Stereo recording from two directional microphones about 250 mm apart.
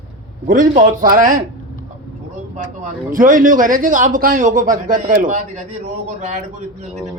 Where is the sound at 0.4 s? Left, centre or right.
Right.